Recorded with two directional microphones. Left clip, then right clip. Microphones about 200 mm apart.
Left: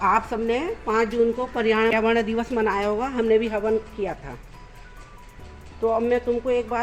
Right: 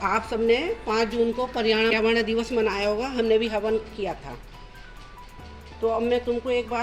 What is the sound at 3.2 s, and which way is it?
Speech, 15° left (ahead or behind).